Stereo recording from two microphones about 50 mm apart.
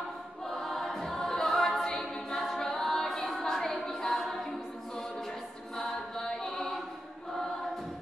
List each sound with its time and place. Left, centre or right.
0.5 s choir: centre
2.0 s a capella: centre
5.8 s chant: centre